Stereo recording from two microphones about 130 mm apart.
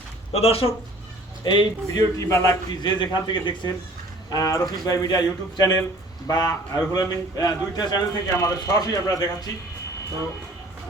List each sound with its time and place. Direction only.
0.3 s speech: 50° left (ahead or behind)
1.5 s a man's voice: 35° left (ahead or behind)
3.0 s a man's voice: 35° left (ahead or behind)